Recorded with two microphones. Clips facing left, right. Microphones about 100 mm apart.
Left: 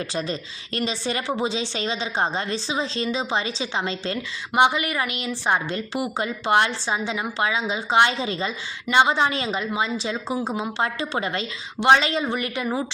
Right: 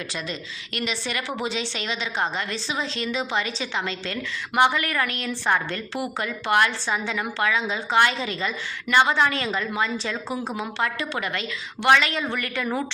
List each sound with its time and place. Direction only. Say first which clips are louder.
0.1 s a woman's voice: left 4 dB; 35° left (ahead or behind); by 12.8 s 20° left (ahead or behind)